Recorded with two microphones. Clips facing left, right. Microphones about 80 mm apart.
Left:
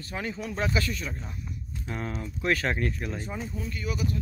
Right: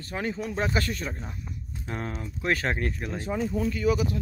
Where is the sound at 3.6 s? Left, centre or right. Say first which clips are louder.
Right 9 dB; right.